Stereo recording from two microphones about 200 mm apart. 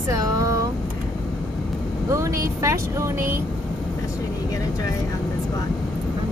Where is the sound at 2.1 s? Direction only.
15° right (ahead or behind).